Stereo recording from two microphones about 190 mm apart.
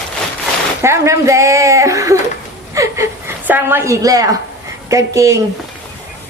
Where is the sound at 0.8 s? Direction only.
15° right (ahead or behind).